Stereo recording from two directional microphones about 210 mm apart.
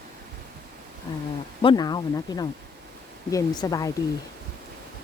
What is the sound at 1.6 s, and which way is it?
Speech, 20° left (ahead or behind).